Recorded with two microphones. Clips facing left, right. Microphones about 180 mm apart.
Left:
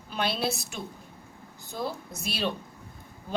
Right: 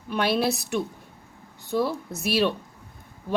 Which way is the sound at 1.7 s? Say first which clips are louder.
Right 8 dB; 65° right (ahead or behind).